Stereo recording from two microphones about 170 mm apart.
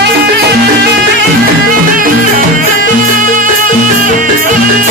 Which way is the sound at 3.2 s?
50° right (ahead or behind).